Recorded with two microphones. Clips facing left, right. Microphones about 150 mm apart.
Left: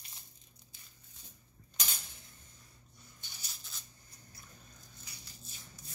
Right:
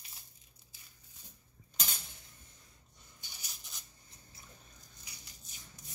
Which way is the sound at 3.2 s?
15° right (ahead or behind).